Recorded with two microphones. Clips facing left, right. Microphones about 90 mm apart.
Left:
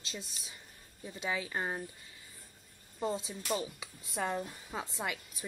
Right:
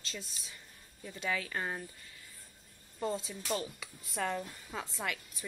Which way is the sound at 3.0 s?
5° left (ahead or behind).